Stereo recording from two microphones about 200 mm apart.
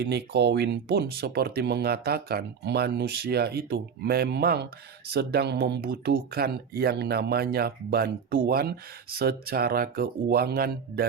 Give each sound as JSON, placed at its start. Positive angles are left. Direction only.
{"t": 0.0, "sound": "speech", "side_deg": -55}